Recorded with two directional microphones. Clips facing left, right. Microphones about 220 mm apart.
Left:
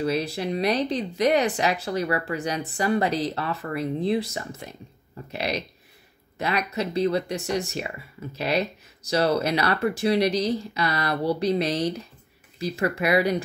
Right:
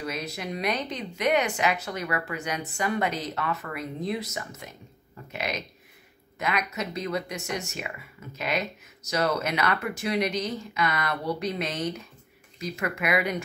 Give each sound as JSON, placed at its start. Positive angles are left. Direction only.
{"t": 0.0, "sound": "speech", "side_deg": 30}